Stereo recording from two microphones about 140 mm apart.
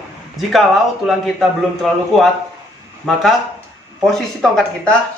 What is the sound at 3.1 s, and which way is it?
Speech, 5° left (ahead or behind).